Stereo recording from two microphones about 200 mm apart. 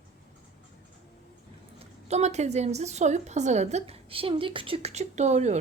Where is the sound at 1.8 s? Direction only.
35° right (ahead or behind).